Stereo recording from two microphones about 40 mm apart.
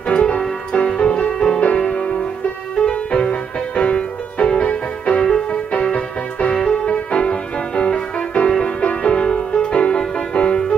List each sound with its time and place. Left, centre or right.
0.1 s keyboard: left
0.7 s music: left
2.8 s music: left
5.2 s music: centre
6.9 s music: left